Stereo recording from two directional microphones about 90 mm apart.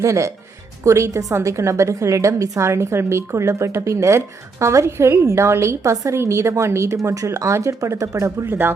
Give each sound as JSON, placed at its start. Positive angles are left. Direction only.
{"t": 0.0, "sound": "a woman's voice", "side_deg": -35}